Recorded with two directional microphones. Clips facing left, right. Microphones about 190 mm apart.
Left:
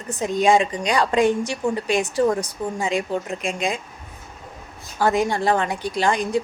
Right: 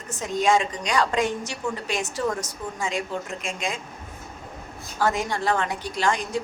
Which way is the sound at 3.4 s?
15° left (ahead or behind).